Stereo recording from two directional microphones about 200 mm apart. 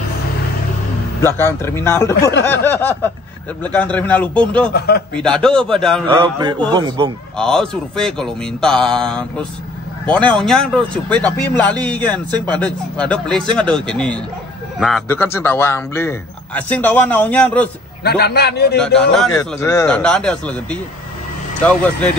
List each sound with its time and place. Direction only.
1.2 s a man's voice: 10° left (ahead or behind)
4.7 s speech: 55° left (ahead or behind)
5.1 s speech: 5° left (ahead or behind)
6.0 s a sound: 25° right (ahead or behind)
7.3 s a man's voice: 5° left (ahead or behind)
12.3 s a sound: 20° right (ahead or behind)
12.5 s speech: 5° left (ahead or behind)
15.0 s a man's voice: 10° left (ahead or behind)
18.0 s a man's voice: 55° left (ahead or behind)
18.9 s speech: 5° left (ahead or behind)
19.3 s a man's voice: 15° left (ahead or behind)